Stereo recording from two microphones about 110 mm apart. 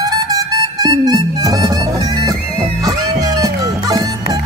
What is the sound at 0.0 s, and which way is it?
Music, 35° right (ahead or behind).